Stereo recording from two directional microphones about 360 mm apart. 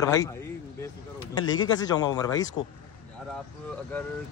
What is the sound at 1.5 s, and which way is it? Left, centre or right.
Speech, centre.